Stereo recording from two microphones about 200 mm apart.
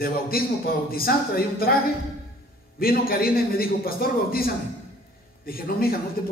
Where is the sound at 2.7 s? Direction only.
50° left (ahead or behind).